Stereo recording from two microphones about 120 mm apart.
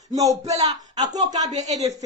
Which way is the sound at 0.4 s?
65° right (ahead or behind).